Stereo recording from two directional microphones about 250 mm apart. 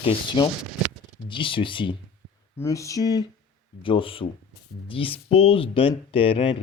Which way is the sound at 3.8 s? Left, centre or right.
Left.